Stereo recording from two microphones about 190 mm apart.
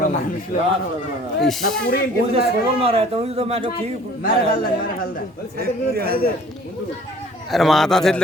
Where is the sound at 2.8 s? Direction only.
30° right (ahead or behind).